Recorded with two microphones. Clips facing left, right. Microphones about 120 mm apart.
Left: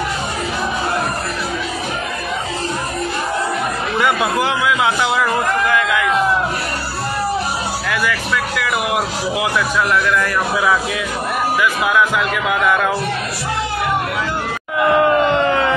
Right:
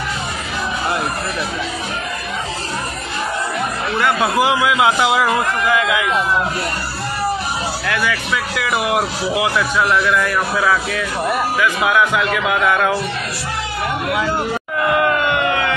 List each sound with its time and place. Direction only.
4.2 s a man's voice: 10° right (ahead or behind)
7.9 s speech: centre (ahead or behind)
11.6 s speech: centre (ahead or behind)
15.0 s a sound: 30° left (ahead or behind)